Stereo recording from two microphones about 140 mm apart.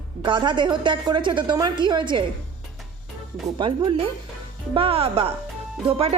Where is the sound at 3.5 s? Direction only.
35° right (ahead or behind).